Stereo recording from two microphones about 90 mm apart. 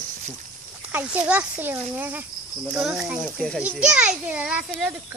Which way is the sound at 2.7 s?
5° right (ahead or behind).